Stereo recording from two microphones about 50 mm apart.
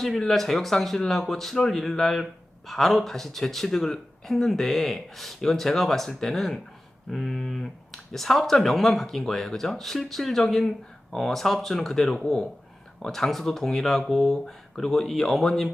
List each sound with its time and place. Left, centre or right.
0.0 s speech: centre
12.2 s speech: centre